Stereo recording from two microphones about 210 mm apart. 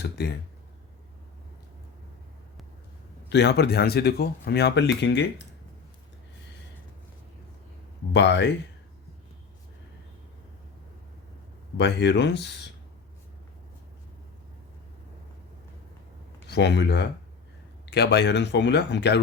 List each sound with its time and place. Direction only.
0.2 s speech: 50° left (ahead or behind)
3.2 s speech: 55° left (ahead or behind)
8.1 s speech: 55° left (ahead or behind)
11.8 s speech: 55° left (ahead or behind)
16.5 s speech: 55° left (ahead or behind)